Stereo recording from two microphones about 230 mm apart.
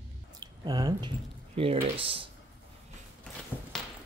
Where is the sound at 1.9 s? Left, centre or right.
Right.